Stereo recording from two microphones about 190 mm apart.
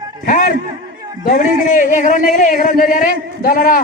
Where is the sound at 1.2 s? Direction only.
45° left (ahead or behind).